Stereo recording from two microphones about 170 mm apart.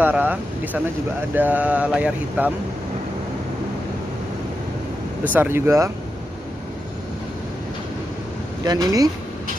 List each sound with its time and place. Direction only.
0.0 s speech: 10° right (ahead or behind)
5.2 s speech: 10° right (ahead or behind)
8.6 s speech: 20° right (ahead or behind)